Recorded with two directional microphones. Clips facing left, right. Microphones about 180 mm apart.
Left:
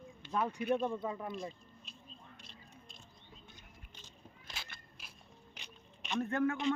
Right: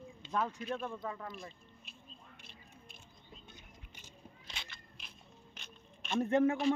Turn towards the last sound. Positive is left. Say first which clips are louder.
# right 4 dB
turn(degrees=-25)  # may be behind; listen again after turning